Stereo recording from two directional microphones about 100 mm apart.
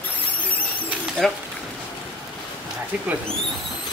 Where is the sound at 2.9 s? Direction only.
15° right (ahead or behind).